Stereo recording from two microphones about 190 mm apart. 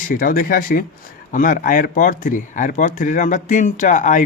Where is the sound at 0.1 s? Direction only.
50° left (ahead or behind).